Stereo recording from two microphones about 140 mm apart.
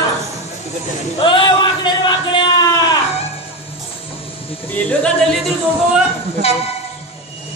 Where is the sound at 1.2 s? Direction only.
35° left (ahead or behind).